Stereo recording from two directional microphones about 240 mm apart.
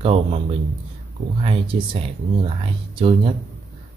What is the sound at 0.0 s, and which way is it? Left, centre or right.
Speech, right.